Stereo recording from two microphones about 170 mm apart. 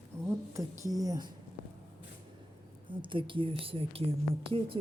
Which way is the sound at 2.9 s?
30° right (ahead or behind).